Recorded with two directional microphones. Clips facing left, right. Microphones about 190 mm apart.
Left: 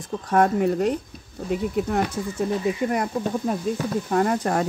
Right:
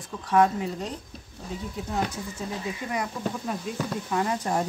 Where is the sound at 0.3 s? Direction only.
55° left (ahead or behind).